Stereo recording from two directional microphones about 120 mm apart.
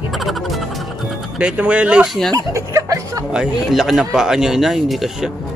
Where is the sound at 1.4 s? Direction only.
10° right (ahead or behind).